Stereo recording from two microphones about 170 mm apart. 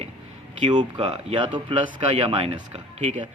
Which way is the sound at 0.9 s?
35° right (ahead or behind).